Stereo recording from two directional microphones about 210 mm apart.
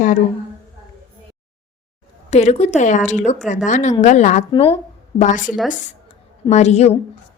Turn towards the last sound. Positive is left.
turn(degrees=30)  # may be behind; listen again after turning